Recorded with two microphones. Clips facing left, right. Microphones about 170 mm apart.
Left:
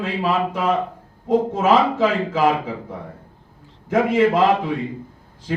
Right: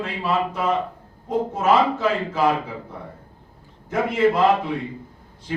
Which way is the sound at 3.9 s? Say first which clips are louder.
Left 3 dB; 90° left.